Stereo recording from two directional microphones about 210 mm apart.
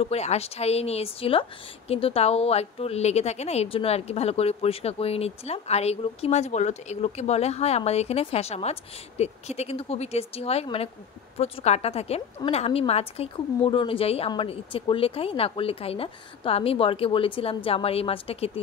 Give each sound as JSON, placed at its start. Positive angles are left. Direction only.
{"t": 0.0, "sound": "a woman's voice", "side_deg": 30}